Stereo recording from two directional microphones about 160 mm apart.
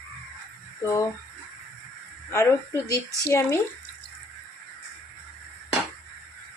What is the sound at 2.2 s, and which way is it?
Speech, 15° left (ahead or behind).